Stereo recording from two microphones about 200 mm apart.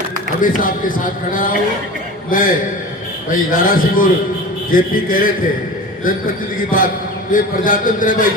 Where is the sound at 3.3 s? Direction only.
45° left (ahead or behind).